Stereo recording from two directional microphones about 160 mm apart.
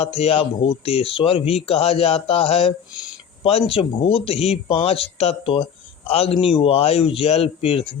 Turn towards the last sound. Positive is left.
turn(degrees=40)  # may be behind; listen again after turning